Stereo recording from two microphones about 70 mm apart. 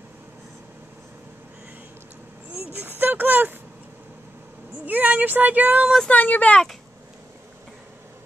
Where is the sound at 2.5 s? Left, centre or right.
Right.